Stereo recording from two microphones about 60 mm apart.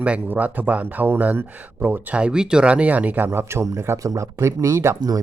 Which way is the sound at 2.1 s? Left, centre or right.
Centre.